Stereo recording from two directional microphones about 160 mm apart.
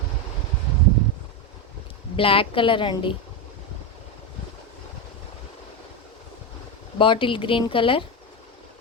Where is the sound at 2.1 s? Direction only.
35° left (ahead or behind).